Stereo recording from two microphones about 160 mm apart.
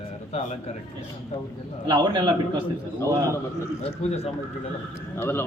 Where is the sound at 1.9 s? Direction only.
30° right (ahead or behind).